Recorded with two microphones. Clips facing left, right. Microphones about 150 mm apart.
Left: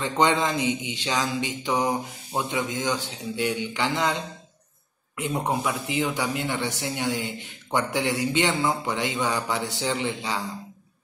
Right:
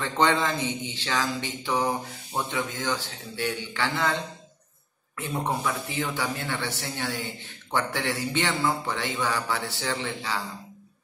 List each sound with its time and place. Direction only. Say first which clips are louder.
0.0 s a man's voice: left 2 dB; 15° left (ahead or behind)